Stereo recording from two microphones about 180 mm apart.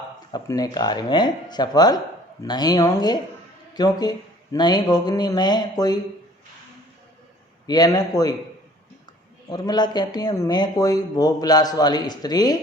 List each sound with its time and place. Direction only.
0.3 s speech: 20° left (ahead or behind)
7.7 s speech: 20° left (ahead or behind)
9.5 s speech: 25° left (ahead or behind)